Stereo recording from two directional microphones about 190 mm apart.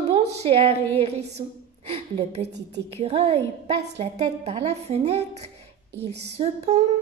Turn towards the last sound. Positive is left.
turn(degrees=-35)  # may be behind; listen again after turning